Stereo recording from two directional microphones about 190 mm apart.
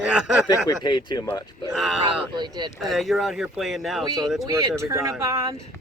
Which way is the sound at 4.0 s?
20° right (ahead or behind).